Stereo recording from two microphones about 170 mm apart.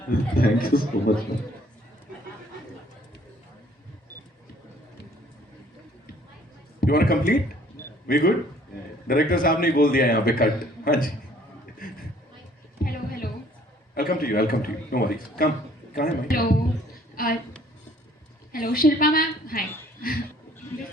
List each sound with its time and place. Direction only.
0.1 s a man's voice: 60° left (ahead or behind)
6.7 s a man's voice: 60° left (ahead or behind)
11.8 s a sound: 55° left (ahead or behind)
13.9 s a man's voice: 60° left (ahead or behind)
18.5 s a woman's voice: 60° left (ahead or behind)